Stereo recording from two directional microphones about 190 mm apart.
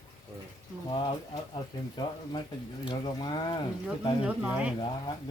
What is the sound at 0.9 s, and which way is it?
Speech, 25° left (ahead or behind).